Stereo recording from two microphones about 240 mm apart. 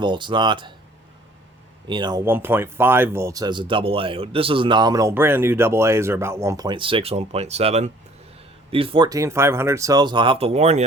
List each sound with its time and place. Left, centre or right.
0.0 s speech: centre
1.9 s speech: centre